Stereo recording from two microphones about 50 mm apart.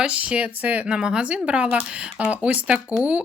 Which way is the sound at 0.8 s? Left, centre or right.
Centre.